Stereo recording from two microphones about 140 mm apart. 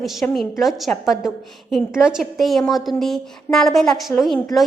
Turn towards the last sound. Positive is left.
turn(degrees=0)  # may be behind; listen again after turning